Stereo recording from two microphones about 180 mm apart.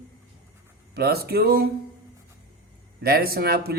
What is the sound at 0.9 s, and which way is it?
Speech, 60° right (ahead or behind).